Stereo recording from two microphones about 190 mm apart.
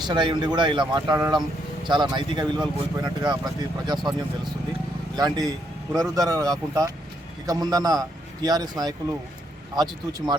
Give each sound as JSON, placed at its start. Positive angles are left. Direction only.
{"t": 0.0, "sound": "speech", "side_deg": -25}
{"t": 5.1, "sound": "speech", "side_deg": -20}